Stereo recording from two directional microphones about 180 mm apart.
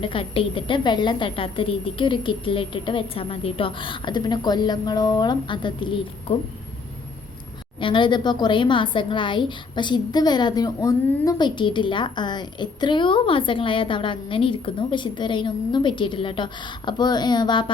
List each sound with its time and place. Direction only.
0.0 s a woman's voice: 30° left (ahead or behind)
7.8 s a woman's voice: 25° left (ahead or behind)